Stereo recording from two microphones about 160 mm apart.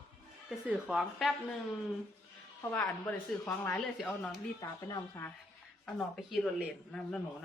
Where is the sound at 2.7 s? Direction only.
10° left (ahead or behind).